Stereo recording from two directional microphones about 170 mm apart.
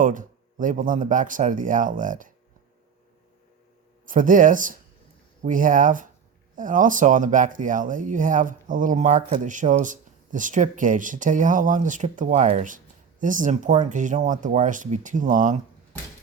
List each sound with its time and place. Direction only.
0.0 s speech: 50° right (ahead or behind)
4.0 s speech: 50° right (ahead or behind)